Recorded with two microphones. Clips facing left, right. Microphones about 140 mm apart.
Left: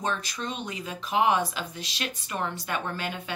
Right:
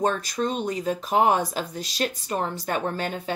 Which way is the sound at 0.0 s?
45° right (ahead or behind).